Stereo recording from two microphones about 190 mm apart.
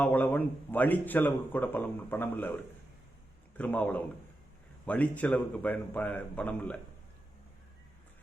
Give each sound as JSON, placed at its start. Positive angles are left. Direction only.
{"t": 0.0, "sound": "speech", "side_deg": 10}
{"t": 3.6, "sound": "speech", "side_deg": 10}